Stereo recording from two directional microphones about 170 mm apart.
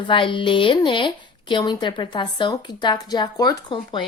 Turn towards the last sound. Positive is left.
turn(degrees=30)  # may be behind; listen again after turning